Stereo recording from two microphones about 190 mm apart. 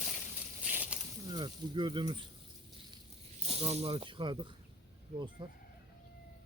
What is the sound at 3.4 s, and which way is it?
Speech, 30° right (ahead or behind).